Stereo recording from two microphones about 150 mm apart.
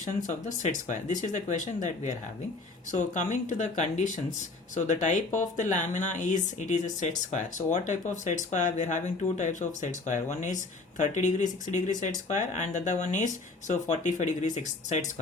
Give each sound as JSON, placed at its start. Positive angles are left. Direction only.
{"t": 0.3, "sound": "speech", "side_deg": 55}